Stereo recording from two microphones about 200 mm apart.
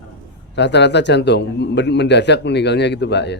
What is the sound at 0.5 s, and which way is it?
Speech, 60° left (ahead or behind).